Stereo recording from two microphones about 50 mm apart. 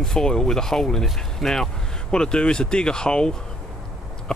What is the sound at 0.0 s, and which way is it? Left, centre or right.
Speech, centre.